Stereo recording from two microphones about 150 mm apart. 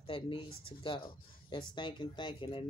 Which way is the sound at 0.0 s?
35° left (ahead or behind).